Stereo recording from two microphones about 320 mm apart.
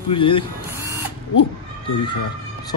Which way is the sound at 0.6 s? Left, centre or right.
Centre.